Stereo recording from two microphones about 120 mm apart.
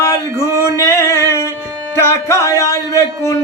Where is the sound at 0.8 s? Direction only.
20° left (ahead or behind).